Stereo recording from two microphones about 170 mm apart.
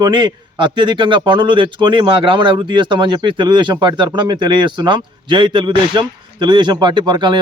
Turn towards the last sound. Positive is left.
turn(degrees=-25)  # may be behind; listen again after turning